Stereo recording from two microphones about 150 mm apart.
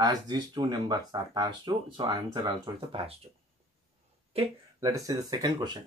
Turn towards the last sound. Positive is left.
turn(degrees=-25)  # may be behind; listen again after turning